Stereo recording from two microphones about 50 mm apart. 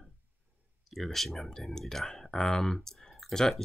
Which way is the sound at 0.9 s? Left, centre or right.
Centre.